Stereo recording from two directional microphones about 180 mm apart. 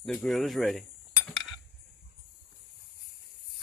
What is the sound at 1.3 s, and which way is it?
Cutlery, centre (ahead or behind).